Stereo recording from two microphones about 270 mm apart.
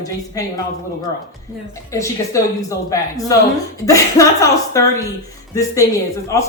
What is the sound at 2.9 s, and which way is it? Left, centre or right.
Speech, centre.